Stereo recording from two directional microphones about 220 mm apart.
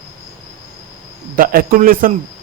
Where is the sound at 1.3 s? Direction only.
40° right (ahead or behind).